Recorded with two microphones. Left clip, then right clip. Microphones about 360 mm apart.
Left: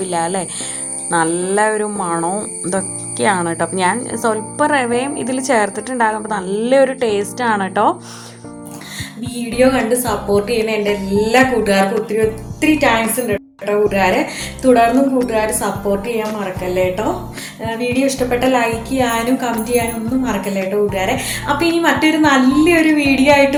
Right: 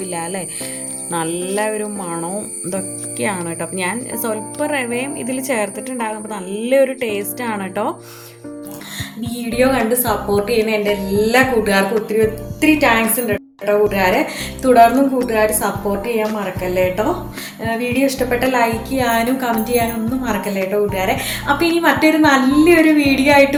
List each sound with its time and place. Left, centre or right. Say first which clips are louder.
1.1 s speech: left 5 dB; right
9.4 s a woman's voice: left 2 dB; centre